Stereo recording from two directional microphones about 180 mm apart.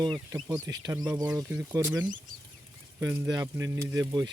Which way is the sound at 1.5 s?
10° right (ahead or behind).